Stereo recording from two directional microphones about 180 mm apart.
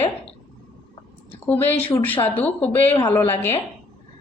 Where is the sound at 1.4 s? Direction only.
10° left (ahead or behind).